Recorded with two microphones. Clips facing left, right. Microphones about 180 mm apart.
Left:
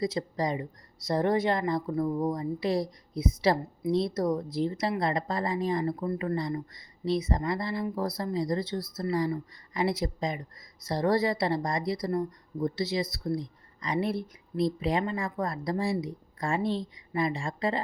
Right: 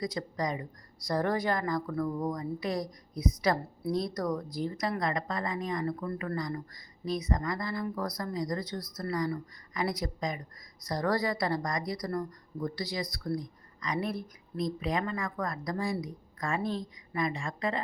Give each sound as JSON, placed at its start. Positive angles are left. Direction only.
{"t": 0.0, "sound": "speech", "side_deg": 25}